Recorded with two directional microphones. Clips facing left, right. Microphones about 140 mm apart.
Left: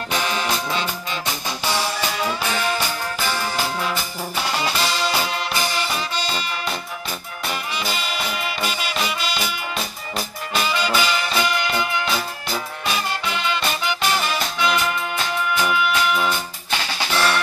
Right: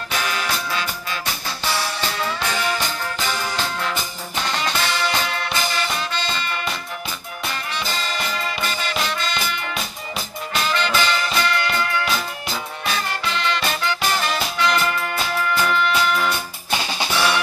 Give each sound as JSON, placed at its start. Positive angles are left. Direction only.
{"t": 0.1, "sound": "music", "side_deg": 25}
{"t": 16.7, "sound": "drum", "side_deg": -15}